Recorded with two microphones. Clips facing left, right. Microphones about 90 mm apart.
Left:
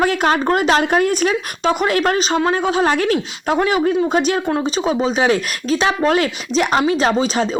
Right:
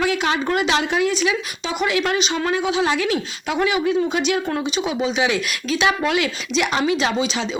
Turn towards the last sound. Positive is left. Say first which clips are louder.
# left 5 dB
turn(degrees=40)  # may be behind; listen again after turning